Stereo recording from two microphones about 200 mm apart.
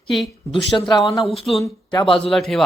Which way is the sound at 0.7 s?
15° left (ahead or behind).